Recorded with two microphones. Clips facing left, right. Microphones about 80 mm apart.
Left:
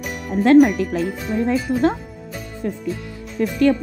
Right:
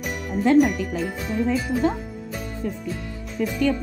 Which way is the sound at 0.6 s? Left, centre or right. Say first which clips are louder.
Left 5 dB; left.